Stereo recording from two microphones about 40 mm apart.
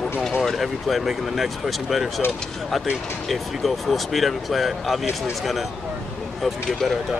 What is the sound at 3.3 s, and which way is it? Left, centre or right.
Speech, centre.